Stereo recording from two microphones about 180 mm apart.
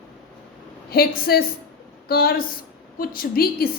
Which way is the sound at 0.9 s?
55° left (ahead or behind).